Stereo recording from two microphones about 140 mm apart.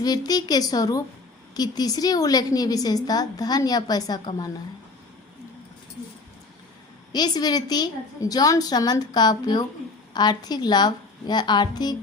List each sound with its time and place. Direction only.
0.0 s a woman's voice: 30° left (ahead or behind)
7.1 s a woman's voice: 30° left (ahead or behind)